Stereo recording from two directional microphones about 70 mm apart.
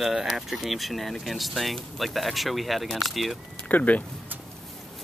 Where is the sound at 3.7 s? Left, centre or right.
Left.